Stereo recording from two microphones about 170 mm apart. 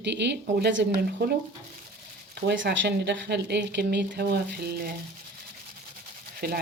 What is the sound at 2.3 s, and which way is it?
Speech, 80° right.